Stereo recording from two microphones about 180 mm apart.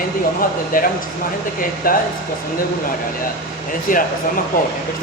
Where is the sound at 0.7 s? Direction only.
50° left (ahead or behind).